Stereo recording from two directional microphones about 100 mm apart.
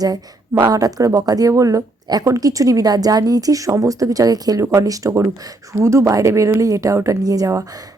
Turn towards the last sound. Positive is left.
turn(degrees=-30)  # may be behind; listen again after turning